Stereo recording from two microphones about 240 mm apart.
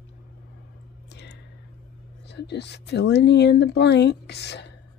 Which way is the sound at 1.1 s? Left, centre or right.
Left.